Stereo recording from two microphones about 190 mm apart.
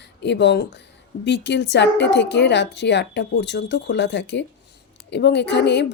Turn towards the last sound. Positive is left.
turn(degrees=65)  # may be behind; listen again after turning